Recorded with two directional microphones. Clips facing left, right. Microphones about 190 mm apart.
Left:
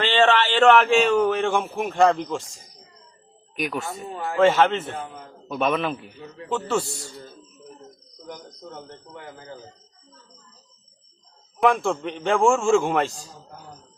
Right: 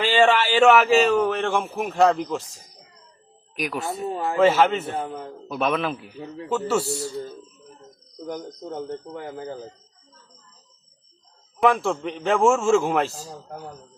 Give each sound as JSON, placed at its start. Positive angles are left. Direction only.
{"t": 0.0, "sound": "a man's voice", "side_deg": -10}
{"t": 3.5, "sound": "a man's voice", "side_deg": 0}
{"t": 4.1, "sound": "speech", "side_deg": -30}
{"t": 4.4, "sound": "a man's voice", "side_deg": -5}
{"t": 9.1, "sound": "speech", "side_deg": -35}
{"t": 11.6, "sound": "a man's voice", "side_deg": 0}